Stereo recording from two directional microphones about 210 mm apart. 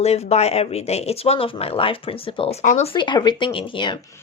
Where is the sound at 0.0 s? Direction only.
30° left (ahead or behind).